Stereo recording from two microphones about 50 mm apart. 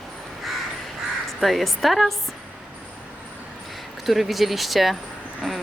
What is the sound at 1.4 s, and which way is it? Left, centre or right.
Speech, centre.